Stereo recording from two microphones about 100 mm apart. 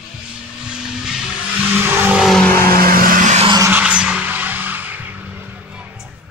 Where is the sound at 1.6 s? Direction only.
20° right (ahead or behind).